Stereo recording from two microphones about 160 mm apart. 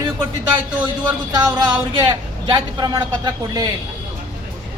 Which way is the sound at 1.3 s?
25° right (ahead or behind).